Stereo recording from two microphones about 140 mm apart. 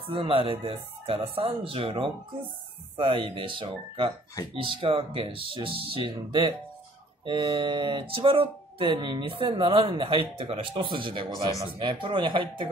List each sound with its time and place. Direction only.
0.0 s speech: 40° right (ahead or behind)